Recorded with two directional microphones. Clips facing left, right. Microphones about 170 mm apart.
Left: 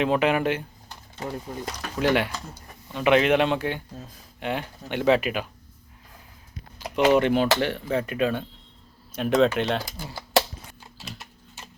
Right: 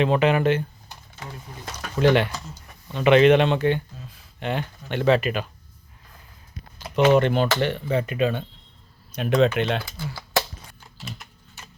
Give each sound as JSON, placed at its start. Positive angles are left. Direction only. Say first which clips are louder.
{"t": 0.0, "sound": "speech", "louder": "right 2 dB", "side_deg": 5}
{"t": 1.8, "sound": "speech", "louder": "right 4 dB", "side_deg": 5}
{"t": 7.2, "sound": "speech", "louder": "even", "side_deg": 10}
{"t": 10.0, "sound": "a sound", "louder": "left 2 dB", "side_deg": 20}